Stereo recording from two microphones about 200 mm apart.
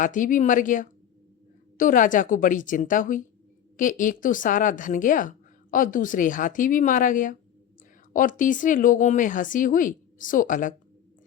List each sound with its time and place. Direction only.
0.0 s a woman's voice: 40° left (ahead or behind)